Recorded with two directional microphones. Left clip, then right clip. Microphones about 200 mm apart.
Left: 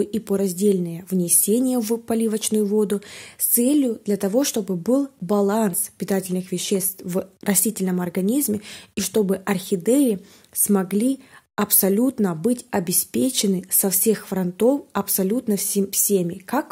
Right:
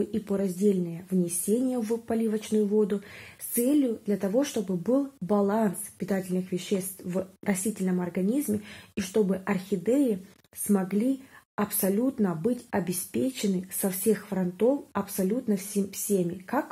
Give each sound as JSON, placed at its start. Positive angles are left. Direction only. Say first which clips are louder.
{"t": 0.0, "sound": "speech", "louder": "left 7 dB", "side_deg": 35}